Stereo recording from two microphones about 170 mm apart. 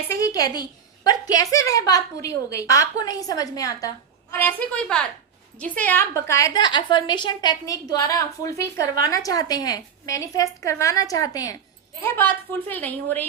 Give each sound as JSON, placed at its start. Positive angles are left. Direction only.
{"t": 0.1, "sound": "a woman's voice", "side_deg": 20}